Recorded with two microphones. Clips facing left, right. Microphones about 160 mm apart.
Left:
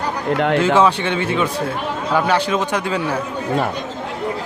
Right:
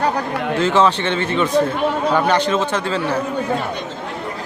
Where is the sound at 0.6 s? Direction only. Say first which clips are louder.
Right 4 dB; 10° left (ahead or behind).